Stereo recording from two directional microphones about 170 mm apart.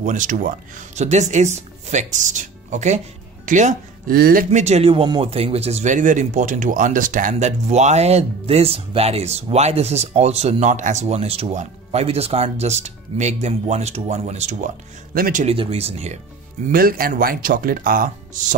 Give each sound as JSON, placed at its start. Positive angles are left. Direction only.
{"t": 0.0, "sound": "speech", "side_deg": -50}
{"t": 4.5, "sound": "speech", "side_deg": -40}
{"t": 15.1, "sound": "speech", "side_deg": -55}
{"t": 15.4, "sound": "speech", "side_deg": -35}
{"t": 16.7, "sound": "speech", "side_deg": -60}